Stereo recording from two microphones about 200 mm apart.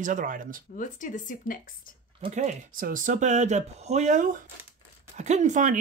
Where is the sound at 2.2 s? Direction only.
35° right (ahead or behind).